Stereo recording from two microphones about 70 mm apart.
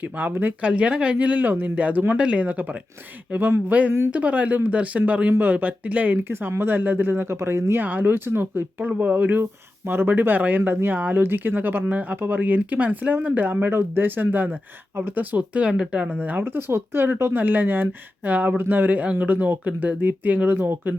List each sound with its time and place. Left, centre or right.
0.0 s speech: right
0.6 s speech: centre